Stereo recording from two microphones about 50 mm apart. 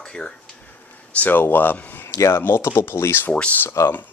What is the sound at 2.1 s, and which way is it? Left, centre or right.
Speech, left.